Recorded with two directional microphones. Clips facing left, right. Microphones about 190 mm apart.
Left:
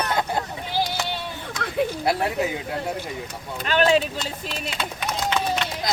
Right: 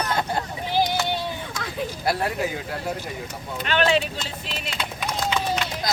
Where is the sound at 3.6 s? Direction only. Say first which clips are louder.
Left 2 dB; 40° left (ahead or behind).